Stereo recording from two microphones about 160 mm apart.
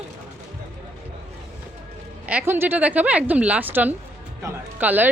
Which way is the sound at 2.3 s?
10° right (ahead or behind).